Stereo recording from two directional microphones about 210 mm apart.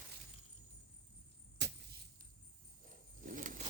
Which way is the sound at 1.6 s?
55° right (ahead or behind).